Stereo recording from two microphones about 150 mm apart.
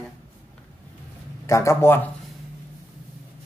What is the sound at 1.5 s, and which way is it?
Speech, 20° left (ahead or behind).